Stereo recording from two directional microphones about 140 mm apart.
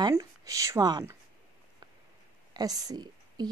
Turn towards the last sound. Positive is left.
turn(degrees=-30)  # may be behind; listen again after turning